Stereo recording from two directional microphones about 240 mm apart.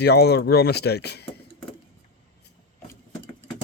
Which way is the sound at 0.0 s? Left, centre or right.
Left.